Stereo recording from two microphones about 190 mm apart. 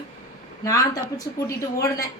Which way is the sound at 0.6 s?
15° left (ahead or behind).